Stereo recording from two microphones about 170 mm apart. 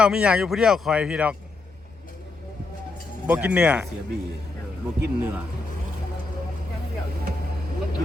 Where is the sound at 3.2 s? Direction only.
10° right (ahead or behind).